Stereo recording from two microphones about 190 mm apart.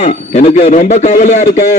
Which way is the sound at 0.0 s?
35° left (ahead or behind).